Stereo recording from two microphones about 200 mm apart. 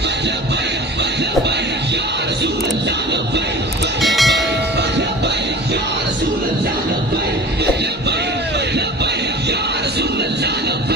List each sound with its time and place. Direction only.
4.0 s train: centre (ahead or behind)